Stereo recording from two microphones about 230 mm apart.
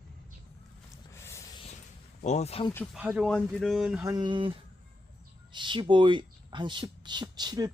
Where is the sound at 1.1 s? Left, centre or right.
Centre.